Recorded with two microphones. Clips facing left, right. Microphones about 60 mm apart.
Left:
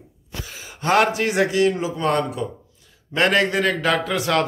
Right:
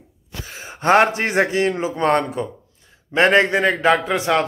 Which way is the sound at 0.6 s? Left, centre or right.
Right.